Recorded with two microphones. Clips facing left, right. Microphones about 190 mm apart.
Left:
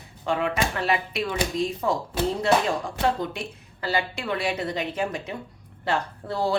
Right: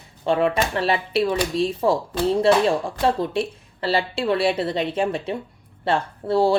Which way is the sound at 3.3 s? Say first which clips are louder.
Right 10 dB; 30° right (ahead or behind).